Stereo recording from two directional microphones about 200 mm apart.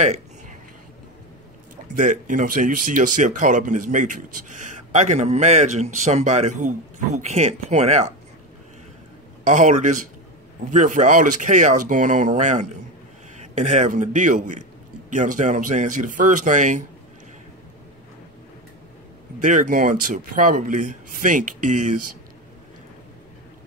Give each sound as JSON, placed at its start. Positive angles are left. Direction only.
{"t": 0.0, "sound": "a sound", "side_deg": -35}
{"t": 2.0, "sound": "speech", "side_deg": -40}
{"t": 9.4, "sound": "speech", "side_deg": -40}
{"t": 19.4, "sound": "speech", "side_deg": -40}